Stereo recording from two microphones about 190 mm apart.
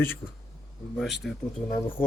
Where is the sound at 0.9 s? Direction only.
Centre (ahead or behind).